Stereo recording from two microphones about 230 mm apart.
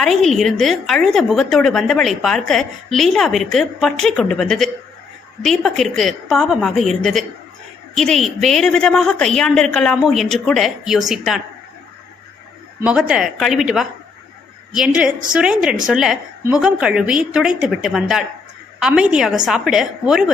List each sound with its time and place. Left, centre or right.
0.0 s a woman's voice: centre
12.8 s a woman's voice: centre